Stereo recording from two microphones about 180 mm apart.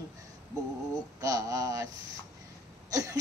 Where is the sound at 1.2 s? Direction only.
20° right (ahead or behind).